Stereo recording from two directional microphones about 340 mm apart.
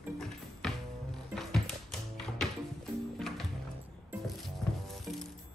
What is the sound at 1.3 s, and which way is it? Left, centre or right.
Music, centre.